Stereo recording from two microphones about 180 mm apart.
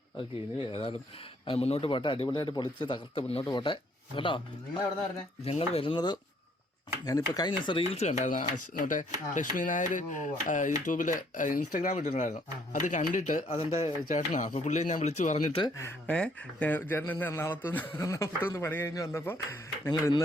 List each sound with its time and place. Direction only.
0.6 s speech: 30° left (ahead or behind)
5.5 s speech: 35° left (ahead or behind)
15.6 s speech: 15° left (ahead or behind)